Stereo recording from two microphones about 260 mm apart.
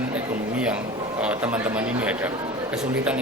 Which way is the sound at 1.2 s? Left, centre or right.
Centre.